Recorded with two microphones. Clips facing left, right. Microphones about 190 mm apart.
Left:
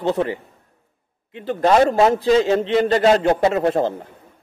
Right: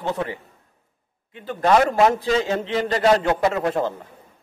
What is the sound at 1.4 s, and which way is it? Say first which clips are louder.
A man's voice: left 3 dB; 30° left (ahead or behind).